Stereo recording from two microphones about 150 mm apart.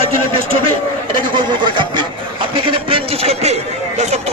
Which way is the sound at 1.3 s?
30° right (ahead or behind).